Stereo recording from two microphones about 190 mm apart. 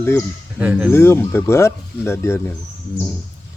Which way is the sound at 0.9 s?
15° left (ahead or behind).